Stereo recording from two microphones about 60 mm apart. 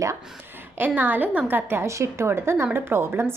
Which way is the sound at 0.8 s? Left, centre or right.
Right.